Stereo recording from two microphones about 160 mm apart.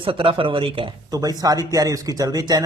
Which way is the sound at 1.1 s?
25° right (ahead or behind).